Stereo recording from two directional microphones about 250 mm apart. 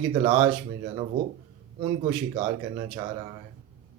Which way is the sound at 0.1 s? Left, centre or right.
Right.